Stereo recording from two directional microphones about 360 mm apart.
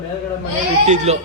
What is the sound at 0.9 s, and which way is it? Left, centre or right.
Speech, centre.